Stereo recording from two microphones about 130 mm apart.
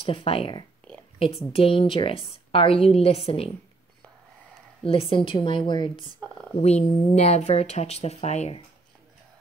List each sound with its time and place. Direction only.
0.0 s a woman's voice: 45° left (ahead or behind)
4.8 s a woman's voice: 45° left (ahead or behind)
6.6 s speech: 60° left (ahead or behind)